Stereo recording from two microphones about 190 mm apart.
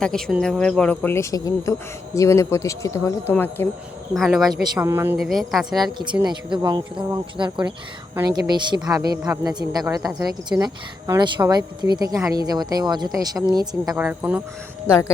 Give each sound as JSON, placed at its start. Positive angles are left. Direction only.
{"t": 0.0, "sound": "speech", "side_deg": 5}
{"t": 4.1, "sound": "speech", "side_deg": 0}
{"t": 4.7, "sound": "speech", "side_deg": -15}
{"t": 5.1, "sound": "speech", "side_deg": 0}
{"t": 6.2, "sound": "speech", "side_deg": -20}
{"t": 13.9, "sound": "speech", "side_deg": -5}